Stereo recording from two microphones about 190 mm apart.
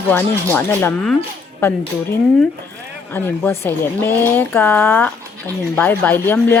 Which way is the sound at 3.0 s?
10° left (ahead or behind).